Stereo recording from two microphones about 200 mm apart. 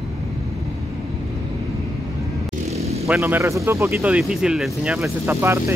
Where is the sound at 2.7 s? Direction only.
30° right (ahead or behind).